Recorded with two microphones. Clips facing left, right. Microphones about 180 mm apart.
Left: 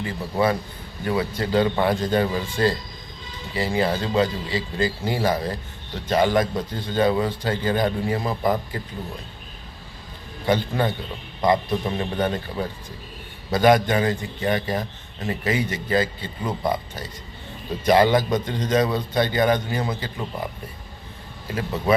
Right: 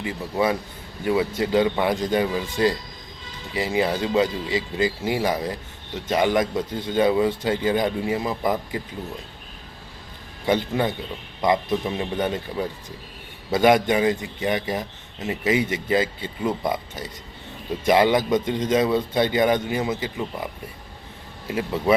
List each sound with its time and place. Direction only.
0.0 s speech: 15° right (ahead or behind)
10.4 s speech: 20° right (ahead or behind)
21.5 s speech: 20° right (ahead or behind)